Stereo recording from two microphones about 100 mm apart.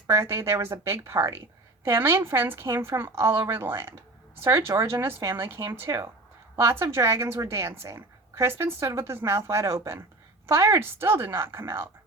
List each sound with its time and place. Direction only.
0.1 s a woman's voice: 25° right (ahead or behind)